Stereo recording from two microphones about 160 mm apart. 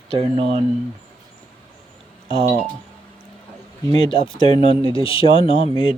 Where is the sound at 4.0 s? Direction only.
35° left (ahead or behind).